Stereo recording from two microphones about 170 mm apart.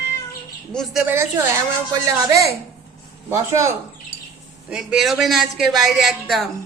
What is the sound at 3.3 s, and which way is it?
Speech, 15° right (ahead or behind).